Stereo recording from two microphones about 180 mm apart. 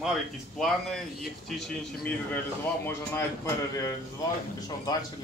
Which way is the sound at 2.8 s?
15° left (ahead or behind).